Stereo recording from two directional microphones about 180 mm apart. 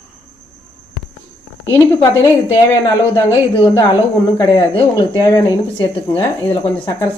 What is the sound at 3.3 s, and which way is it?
A woman's voice, 20° left (ahead or behind).